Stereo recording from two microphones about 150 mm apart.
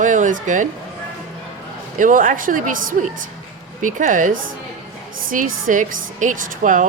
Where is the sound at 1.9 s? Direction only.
60° right (ahead or behind).